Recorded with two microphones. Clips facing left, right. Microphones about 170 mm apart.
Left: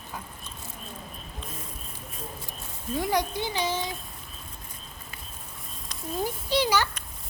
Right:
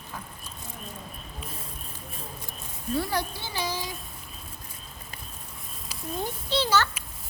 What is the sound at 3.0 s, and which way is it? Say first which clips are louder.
Speech: left 3 dB; 15° left (ahead or behind).